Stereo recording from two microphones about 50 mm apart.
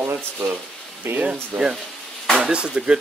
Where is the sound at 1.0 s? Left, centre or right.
Right.